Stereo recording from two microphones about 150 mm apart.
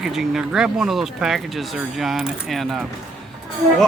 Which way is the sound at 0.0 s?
5° right (ahead or behind).